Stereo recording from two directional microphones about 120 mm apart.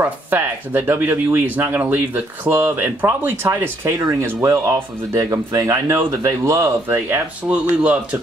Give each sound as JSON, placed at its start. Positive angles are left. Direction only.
{"t": 0.0, "sound": "speech", "side_deg": -15}
{"t": 7.4, "sound": "speech", "side_deg": -10}